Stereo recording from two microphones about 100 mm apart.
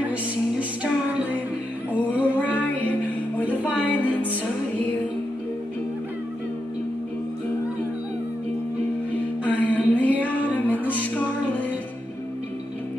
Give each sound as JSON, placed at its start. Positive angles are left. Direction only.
{"t": 0.0, "sound": "music", "side_deg": -15}
{"t": 1.9, "sound": "music", "side_deg": 15}
{"t": 3.7, "sound": "music", "side_deg": 15}
{"t": 9.4, "sound": "a sound", "side_deg": 15}
{"t": 11.0, "sound": "music", "side_deg": 15}